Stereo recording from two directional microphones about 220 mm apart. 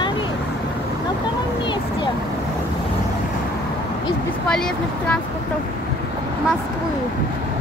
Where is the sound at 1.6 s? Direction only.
20° left (ahead or behind).